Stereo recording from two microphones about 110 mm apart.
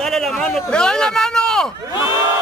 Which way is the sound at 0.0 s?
5° left (ahead or behind).